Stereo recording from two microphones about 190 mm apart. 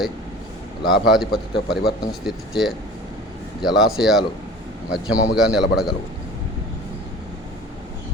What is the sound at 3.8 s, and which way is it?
Speech, centre (ahead or behind).